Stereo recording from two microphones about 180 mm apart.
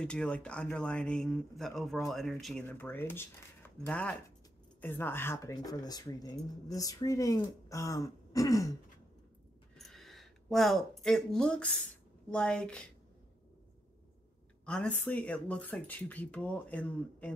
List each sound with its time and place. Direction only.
0.0 s speech: 5° left (ahead or behind)
9.8 s a sound: centre (ahead or behind)
12.3 s speech: 5° left (ahead or behind)
14.7 s speech: 5° left (ahead or behind)